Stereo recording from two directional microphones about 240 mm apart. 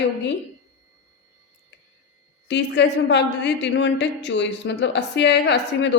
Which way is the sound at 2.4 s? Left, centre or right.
Left.